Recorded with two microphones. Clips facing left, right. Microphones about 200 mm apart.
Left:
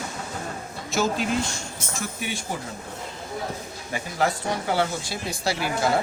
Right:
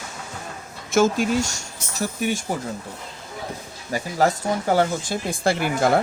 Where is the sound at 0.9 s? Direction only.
50° right (ahead or behind).